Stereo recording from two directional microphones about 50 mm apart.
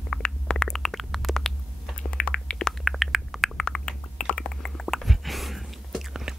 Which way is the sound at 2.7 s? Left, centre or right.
Centre.